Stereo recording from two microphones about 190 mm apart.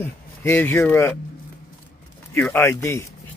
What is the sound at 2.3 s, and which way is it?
Speech, 10° left (ahead or behind).